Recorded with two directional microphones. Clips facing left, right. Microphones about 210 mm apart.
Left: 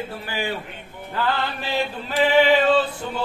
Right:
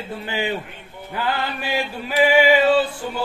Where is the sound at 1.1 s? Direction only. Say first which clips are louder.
Even; 15° right (ahead or behind).